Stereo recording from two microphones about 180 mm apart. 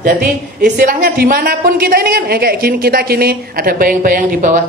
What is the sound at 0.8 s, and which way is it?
A woman's voice, 55° right (ahead or behind).